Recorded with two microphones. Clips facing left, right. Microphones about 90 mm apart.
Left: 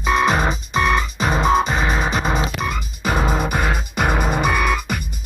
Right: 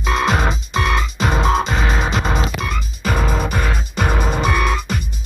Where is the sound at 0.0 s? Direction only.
10° left (ahead or behind).